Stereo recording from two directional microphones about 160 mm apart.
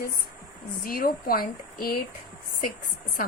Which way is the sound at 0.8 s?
65° left (ahead or behind).